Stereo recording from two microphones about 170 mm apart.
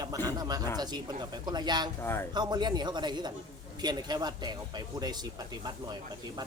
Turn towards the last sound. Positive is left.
turn(degrees=-25)  # may be behind; listen again after turning